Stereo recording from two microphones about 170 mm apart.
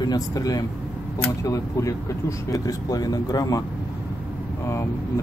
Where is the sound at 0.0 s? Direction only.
20° left (ahead or behind).